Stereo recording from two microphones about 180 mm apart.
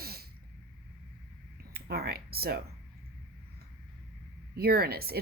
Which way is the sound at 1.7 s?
60° right (ahead or behind).